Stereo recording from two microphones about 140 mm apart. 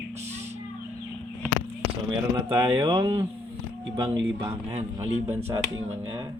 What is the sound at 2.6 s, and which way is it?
Speech, 35° right (ahead or behind).